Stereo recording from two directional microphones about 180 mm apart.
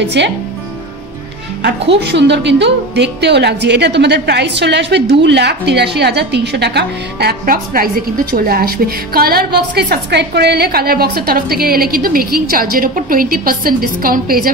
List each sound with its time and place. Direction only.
0.0 s speech: 75° right (ahead or behind)
2.0 s a woman's voice: 75° right (ahead or behind); by 14.5 s 55° right (ahead or behind)